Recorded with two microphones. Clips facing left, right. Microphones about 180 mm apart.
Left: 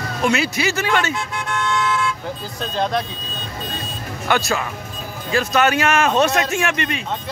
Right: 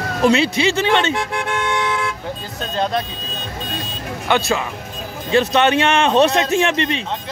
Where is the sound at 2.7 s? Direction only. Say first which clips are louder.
Right 1 dB; centre (ahead or behind).